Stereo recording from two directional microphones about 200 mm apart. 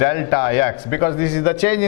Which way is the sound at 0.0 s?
15° left (ahead or behind).